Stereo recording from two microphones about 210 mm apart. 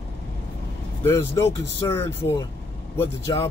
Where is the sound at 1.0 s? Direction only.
10° left (ahead or behind).